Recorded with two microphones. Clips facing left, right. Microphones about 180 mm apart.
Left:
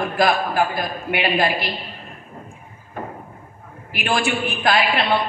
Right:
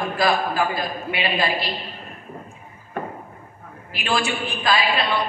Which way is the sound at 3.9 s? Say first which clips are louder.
Left 2 dB; 55° left (ahead or behind).